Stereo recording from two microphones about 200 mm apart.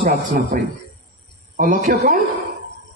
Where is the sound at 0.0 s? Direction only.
45° right (ahead or behind).